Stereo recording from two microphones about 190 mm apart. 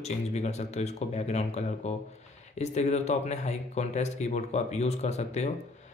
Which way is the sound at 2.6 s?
35° left (ahead or behind).